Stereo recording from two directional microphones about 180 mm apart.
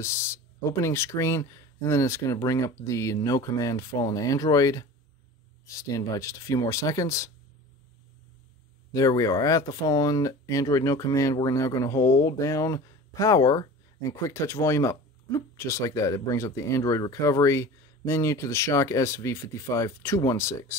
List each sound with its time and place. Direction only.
0.0 s speech: 15° left (ahead or behind)
8.9 s speech: 20° left (ahead or behind)